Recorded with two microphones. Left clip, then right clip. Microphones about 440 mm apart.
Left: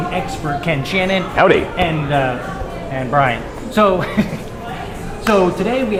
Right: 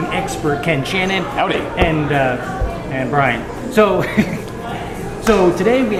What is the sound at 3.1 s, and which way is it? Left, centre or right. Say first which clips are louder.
Speech: left 1 dB; left.